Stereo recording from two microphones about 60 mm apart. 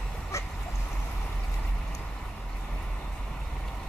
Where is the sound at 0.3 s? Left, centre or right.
Left.